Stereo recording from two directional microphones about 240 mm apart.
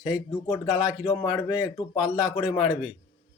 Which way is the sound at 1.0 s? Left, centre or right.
Centre.